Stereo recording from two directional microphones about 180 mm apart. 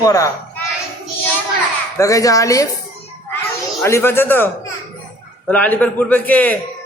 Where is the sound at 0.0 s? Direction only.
20° left (ahead or behind).